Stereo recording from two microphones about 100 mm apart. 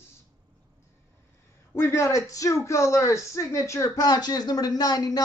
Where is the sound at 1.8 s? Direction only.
25° left (ahead or behind).